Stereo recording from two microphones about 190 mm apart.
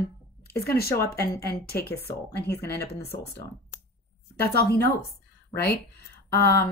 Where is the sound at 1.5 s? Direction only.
55° left (ahead or behind).